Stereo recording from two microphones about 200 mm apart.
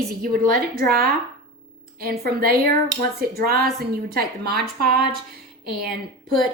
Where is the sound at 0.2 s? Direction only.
45° right (ahead or behind).